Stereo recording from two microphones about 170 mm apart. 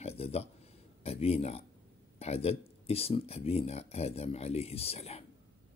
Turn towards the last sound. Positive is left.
turn(degrees=40)  # may be behind; listen again after turning